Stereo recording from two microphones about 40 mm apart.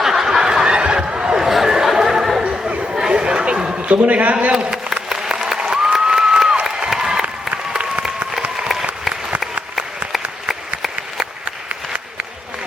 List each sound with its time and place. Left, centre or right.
0.0 s snicker: centre
1.4 s chatter: centre
2.4 s chatter: right
2.9 s chatter: centre
4.0 s a man's voice: right
5.0 s applause: centre
8.6 s applause: centre
10.5 s applause: centre